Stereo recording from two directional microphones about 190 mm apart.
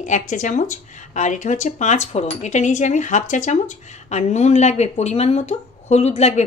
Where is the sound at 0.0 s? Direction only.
40° left (ahead or behind).